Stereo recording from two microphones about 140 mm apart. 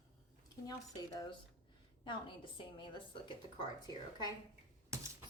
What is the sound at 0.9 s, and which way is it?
Speech, 25° left (ahead or behind).